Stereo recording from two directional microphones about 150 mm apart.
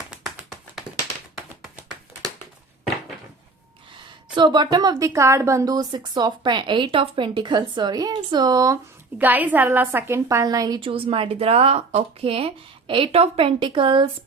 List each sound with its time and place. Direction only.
0.1 s tap: centre (ahead or behind)
4.4 s a woman's voice: 30° right (ahead or behind)
9.1 s a woman's voice: 10° right (ahead or behind)
10.8 s speech: 40° right (ahead or behind)